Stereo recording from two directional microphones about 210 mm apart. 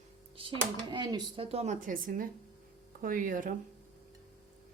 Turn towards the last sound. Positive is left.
turn(degrees=-40)  # may be behind; listen again after turning